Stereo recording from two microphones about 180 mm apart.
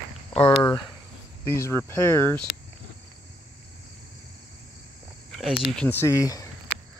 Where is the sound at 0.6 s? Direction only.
20° left (ahead or behind).